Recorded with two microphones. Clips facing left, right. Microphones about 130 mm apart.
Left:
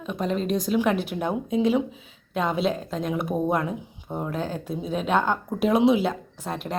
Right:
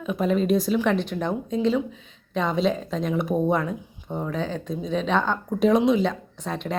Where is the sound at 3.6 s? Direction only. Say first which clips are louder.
Even; 15° left (ahead or behind).